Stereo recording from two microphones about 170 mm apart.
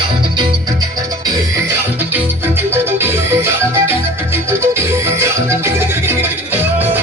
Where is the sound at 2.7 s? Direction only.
15° right (ahead or behind).